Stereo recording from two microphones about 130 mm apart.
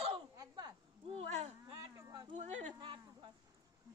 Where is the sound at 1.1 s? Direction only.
55° right (ahead or behind).